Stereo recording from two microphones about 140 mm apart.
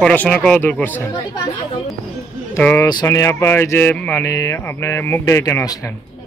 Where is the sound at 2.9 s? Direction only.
25° left (ahead or behind).